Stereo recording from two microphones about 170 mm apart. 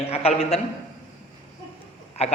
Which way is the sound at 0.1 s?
35° left (ahead or behind).